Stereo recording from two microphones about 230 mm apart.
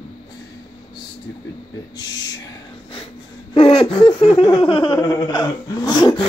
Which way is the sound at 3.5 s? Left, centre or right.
Left.